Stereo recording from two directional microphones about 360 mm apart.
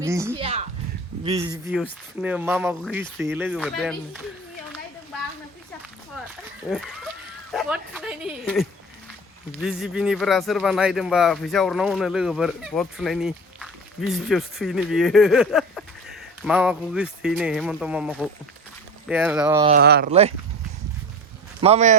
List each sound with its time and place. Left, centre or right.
0.0 s speech: centre
6.7 s speech: centre
19.7 s speech: right
21.6 s speech: centre